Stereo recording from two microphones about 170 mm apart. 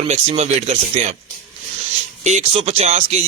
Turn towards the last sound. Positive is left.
turn(degrees=-40)  # may be behind; listen again after turning